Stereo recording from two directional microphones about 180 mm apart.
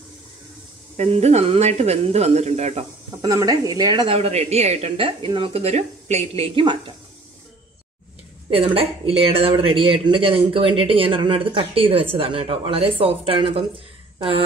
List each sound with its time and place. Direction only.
0.9 s speech: 35° right (ahead or behind)
3.2 s speech: 20° right (ahead or behind)
8.5 s speech: 30° right (ahead or behind)